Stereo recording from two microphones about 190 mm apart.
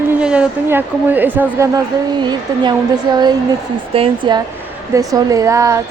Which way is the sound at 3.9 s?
25° right (ahead or behind).